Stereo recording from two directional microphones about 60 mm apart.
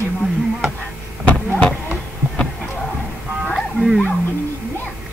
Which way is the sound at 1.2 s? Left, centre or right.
Left.